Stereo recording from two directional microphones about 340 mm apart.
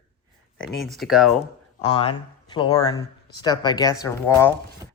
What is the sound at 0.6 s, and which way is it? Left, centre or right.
Speech, centre.